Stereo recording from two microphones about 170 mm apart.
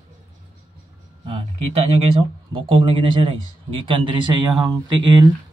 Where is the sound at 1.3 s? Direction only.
35° right (ahead or behind).